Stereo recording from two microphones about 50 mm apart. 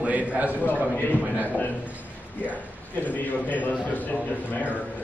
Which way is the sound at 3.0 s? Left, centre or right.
Left.